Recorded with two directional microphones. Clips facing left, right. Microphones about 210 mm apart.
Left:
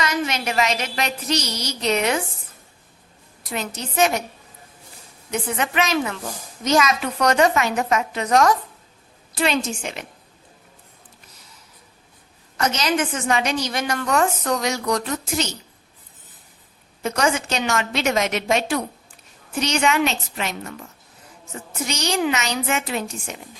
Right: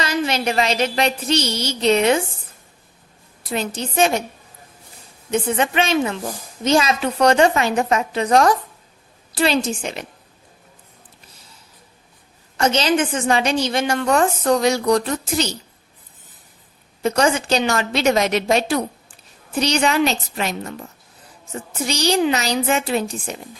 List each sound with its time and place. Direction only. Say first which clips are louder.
0.0 s a woman's voice: right 3 dB; 30° right (ahead or behind)
3.5 s a woman's voice: right 4 dB; 30° right (ahead or behind)
5.3 s a woman's voice: right 5 dB; 30° right (ahead or behind)
12.5 s a woman's voice: right 4 dB; 30° right (ahead or behind)
17.0 s a woman's voice: right 4 dB; 30° right (ahead or behind)
21.8 s a woman's voice: right 4 dB; 35° right (ahead or behind)